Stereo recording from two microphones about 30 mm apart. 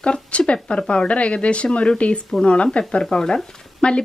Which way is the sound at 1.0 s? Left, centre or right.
Left.